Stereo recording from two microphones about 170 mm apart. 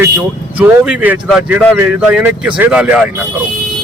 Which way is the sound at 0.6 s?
10° right (ahead or behind).